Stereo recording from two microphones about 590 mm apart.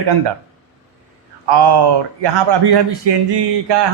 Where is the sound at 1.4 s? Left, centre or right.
Right.